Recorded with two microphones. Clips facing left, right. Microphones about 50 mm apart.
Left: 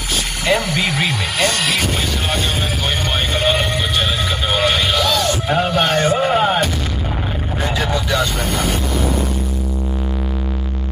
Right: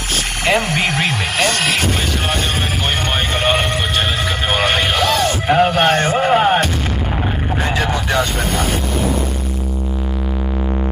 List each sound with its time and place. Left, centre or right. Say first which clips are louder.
0.5 s speech: right 1 dB; right
0.8 s speech: right 1 dB; right
4.6 s music: even; right
6.1 s music: right 2 dB; right